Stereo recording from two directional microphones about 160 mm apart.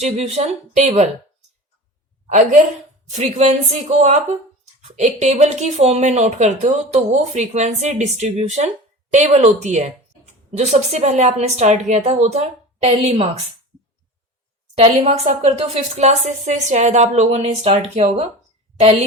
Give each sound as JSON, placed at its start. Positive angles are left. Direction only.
{"t": 0.0, "sound": "speech", "side_deg": -40}
{"t": 2.3, "sound": "a woman's voice", "side_deg": -50}
{"t": 14.8, "sound": "a woman's voice", "side_deg": -40}